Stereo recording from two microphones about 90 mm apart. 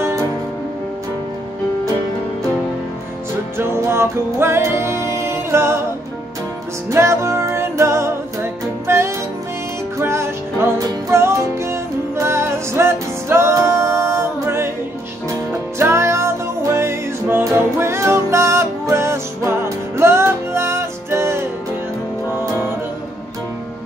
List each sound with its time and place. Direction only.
3.5 s music: 25° right (ahead or behind)
6.9 s music: 30° right (ahead or behind)
15.8 s music: 30° right (ahead or behind)